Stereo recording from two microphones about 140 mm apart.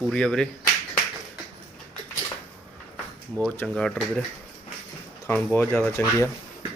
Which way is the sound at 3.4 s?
5° left (ahead or behind).